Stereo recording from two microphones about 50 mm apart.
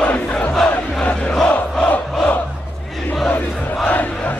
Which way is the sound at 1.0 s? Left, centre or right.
Left.